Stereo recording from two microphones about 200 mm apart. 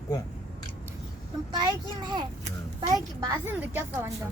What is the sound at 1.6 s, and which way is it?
Speech, 20° right (ahead or behind).